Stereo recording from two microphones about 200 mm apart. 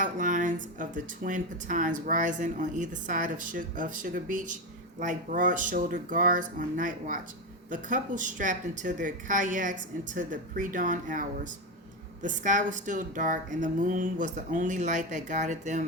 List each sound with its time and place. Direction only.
0.0 s speech: 40° right (ahead or behind)